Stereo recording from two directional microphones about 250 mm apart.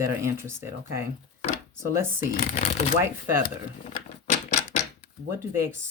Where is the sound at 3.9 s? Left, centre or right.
Left.